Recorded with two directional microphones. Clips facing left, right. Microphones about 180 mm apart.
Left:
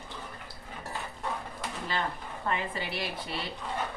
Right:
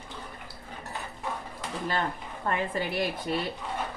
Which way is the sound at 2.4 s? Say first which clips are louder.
Right 4 dB; 45° right (ahead or behind).